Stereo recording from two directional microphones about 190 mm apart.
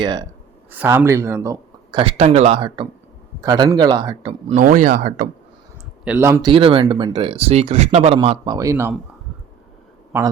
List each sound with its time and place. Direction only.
0.0 s speech: 20° right (ahead or behind)
2.0 s speech: 35° right (ahead or behind)
4.5 s speech: 45° right (ahead or behind)
6.1 s speech: 10° right (ahead or behind)
6.4 s speech: 25° right (ahead or behind)
8.5 s speech: 15° right (ahead or behind)